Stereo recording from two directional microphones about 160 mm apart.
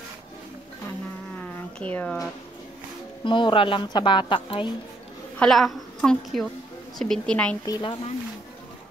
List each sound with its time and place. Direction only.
1.4 s a sound: 10° left (ahead or behind)
3.3 s a woman's voice: 30° left (ahead or behind)
5.4 s a woman's voice: centre (ahead or behind)
7.6 s a woman's voice: 25° left (ahead or behind)